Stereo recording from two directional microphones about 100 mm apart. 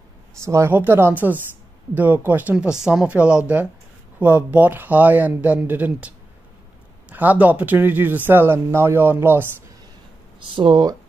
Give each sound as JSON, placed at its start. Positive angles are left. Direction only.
{"t": 0.5, "sound": "a man's voice", "side_deg": -30}
{"t": 2.5, "sound": "a man's voice", "side_deg": -5}
{"t": 10.5, "sound": "speech", "side_deg": -55}